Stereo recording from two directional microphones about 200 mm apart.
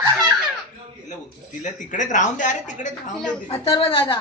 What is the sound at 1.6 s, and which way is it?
Speech, 40° left (ahead or behind).